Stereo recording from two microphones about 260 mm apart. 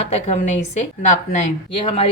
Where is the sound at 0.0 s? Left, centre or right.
Left.